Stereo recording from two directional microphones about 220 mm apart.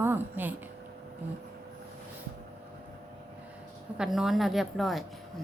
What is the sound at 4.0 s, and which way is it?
A woman's voice, centre (ahead or behind).